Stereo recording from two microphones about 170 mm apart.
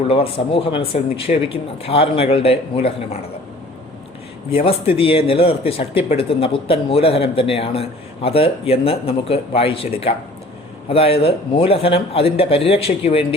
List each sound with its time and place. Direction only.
0.1 s a man's voice: 35° left (ahead or behind)
4.5 s a man's voice: 35° left (ahead or behind)